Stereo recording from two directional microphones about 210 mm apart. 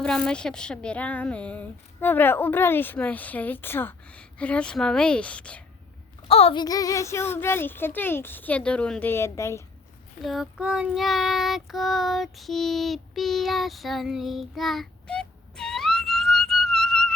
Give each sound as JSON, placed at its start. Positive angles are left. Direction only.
{"t": 0.0, "sound": "a woman's voice", "side_deg": 5}
{"t": 6.2, "sound": "a woman's voice", "side_deg": 25}
{"t": 10.2, "sound": "child singing", "side_deg": 0}